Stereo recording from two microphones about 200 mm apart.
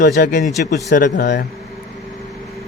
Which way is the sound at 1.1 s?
55° left (ahead or behind).